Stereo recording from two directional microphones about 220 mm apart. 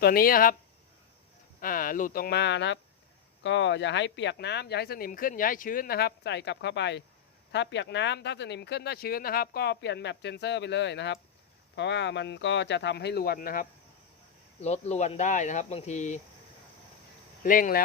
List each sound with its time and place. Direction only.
0.0 s speech: 40° left (ahead or behind)
1.6 s speech: 40° left (ahead or behind)
14.6 s speech: 30° left (ahead or behind)
17.4 s speech: 40° left (ahead or behind)